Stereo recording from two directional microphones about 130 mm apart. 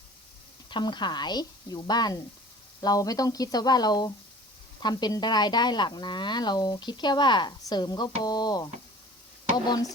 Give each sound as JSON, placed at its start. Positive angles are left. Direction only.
{"t": 0.7, "sound": "a woman's voice", "side_deg": 35}